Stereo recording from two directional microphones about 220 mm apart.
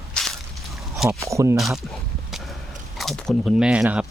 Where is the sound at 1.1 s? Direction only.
15° right (ahead or behind).